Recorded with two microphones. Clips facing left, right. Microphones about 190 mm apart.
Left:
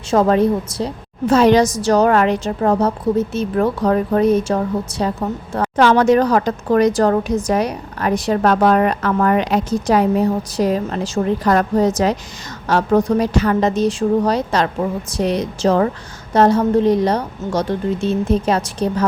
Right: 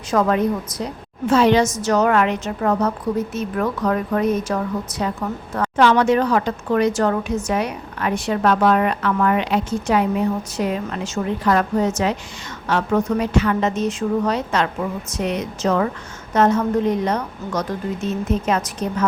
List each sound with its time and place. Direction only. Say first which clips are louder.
0.1 s a woman's voice: left 4 dB; 30° left (ahead or behind)